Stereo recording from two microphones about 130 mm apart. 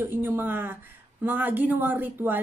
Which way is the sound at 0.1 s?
15° right (ahead or behind).